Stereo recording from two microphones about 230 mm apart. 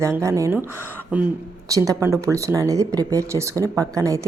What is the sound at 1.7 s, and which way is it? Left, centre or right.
Speech, centre.